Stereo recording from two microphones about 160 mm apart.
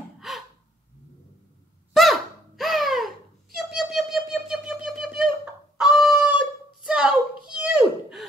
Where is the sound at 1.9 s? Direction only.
Centre (ahead or behind).